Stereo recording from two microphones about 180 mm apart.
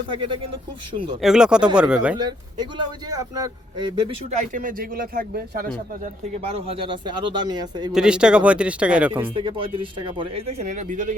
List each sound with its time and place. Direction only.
0.1 s speech: 25° right (ahead or behind)
1.2 s a man's voice: 5° right (ahead or behind)
2.1 s speech: 25° right (ahead or behind)
4.4 s speech: 50° right (ahead or behind)
6.4 s speech: 30° right (ahead or behind)
7.9 s a man's voice: 5° right (ahead or behind)
9.3 s speech: 30° right (ahead or behind); by 11.1 s 45° right (ahead or behind)